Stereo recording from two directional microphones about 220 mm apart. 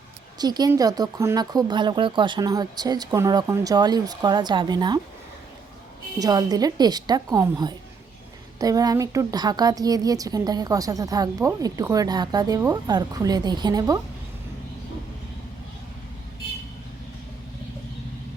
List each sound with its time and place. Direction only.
0.3 s a woman's voice: 20° right (ahead or behind)
6.1 s a woman's voice: 15° right (ahead or behind)